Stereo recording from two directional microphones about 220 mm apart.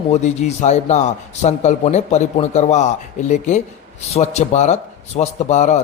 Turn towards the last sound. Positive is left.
turn(degrees=30)  # may be behind; listen again after turning